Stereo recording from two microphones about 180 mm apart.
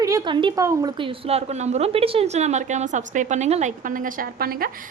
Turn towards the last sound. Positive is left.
turn(degrees=-55)  # may be behind; listen again after turning